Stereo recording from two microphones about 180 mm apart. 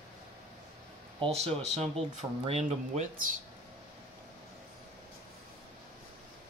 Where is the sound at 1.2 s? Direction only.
35° right (ahead or behind).